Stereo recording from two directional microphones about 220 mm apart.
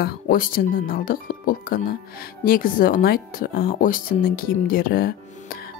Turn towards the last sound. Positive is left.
turn(degrees=40)  # may be behind; listen again after turning